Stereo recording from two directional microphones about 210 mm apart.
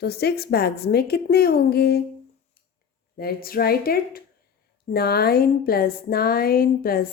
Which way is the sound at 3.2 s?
45° left (ahead or behind).